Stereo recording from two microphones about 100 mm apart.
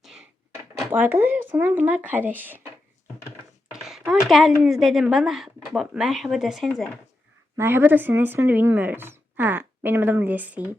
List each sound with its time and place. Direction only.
0.9 s speech: 20° right (ahead or behind)
3.2 s a sound: 5° right (ahead or behind)
4.1 s speech: centre (ahead or behind)
7.5 s speech: 25° right (ahead or behind)